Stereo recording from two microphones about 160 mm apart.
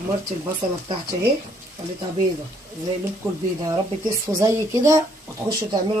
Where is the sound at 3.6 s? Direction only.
20° right (ahead or behind).